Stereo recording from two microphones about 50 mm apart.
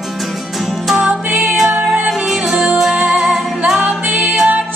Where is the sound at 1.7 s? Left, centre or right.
Right.